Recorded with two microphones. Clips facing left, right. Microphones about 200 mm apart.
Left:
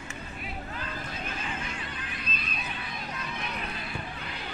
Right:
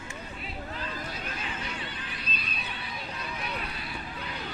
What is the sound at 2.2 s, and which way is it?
Neigh, 35° right (ahead or behind).